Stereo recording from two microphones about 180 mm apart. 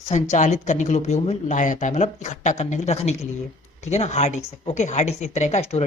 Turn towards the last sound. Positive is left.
turn(degrees=35)  # may be behind; listen again after turning